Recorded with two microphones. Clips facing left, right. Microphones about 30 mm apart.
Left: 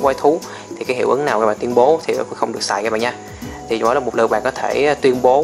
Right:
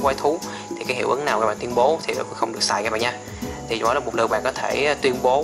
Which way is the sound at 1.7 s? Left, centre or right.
Centre.